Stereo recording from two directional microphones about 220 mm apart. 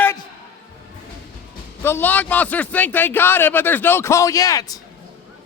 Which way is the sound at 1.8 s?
10° left (ahead or behind).